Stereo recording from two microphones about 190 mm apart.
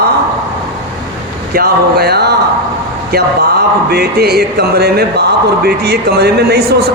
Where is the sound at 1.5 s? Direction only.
55° right (ahead or behind).